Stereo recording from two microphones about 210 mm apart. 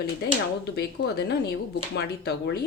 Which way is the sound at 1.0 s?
50° left (ahead or behind).